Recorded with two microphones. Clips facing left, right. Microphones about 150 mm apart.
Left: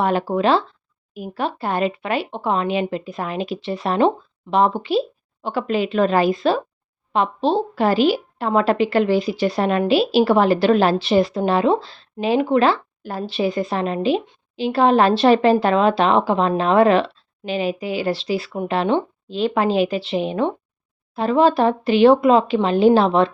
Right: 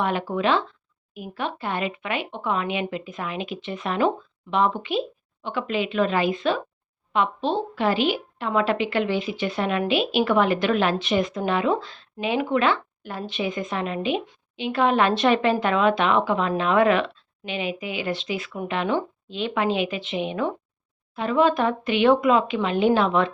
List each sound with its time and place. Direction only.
0.0 s a woman's voice: 35° left (ahead or behind)